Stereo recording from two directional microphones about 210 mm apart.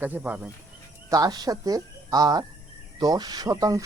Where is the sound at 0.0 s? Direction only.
10° right (ahead or behind).